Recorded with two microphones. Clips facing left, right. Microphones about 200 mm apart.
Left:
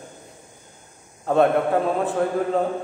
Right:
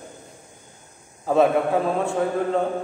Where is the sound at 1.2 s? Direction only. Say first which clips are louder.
Even; centre (ahead or behind).